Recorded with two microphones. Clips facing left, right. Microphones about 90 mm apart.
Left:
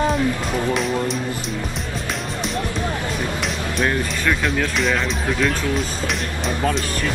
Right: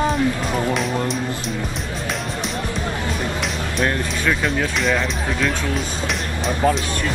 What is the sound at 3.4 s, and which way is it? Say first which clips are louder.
Speech: even; centre (ahead or behind).